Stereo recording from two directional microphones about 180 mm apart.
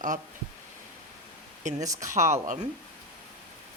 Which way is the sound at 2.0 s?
45° right (ahead or behind).